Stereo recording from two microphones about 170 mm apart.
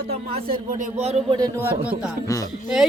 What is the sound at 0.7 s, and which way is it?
Speech, 45° right (ahead or behind).